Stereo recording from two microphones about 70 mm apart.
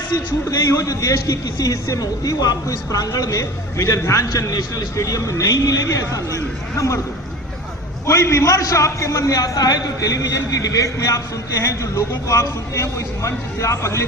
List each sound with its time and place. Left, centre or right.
0.1 s a man's voice: left
0.6 s speech: left
4.3 s a man's voice: left
8.0 s speech: left